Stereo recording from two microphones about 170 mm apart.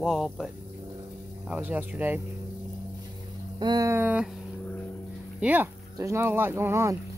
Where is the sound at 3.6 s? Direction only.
25° right (ahead or behind).